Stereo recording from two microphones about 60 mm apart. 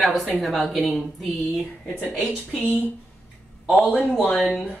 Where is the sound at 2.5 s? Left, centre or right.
Left.